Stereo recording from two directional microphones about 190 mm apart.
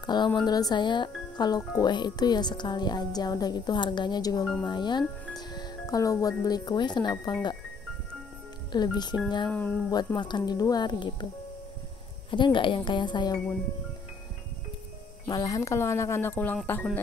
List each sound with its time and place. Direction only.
0.0 s speech: 20° left (ahead or behind)
8.7 s speech: 20° left (ahead or behind)
9.5 s speech: 10° left (ahead or behind)
9.8 s speech: 20° left (ahead or behind)
12.3 s speech: 25° left (ahead or behind)
15.2 s speech: 20° left (ahead or behind)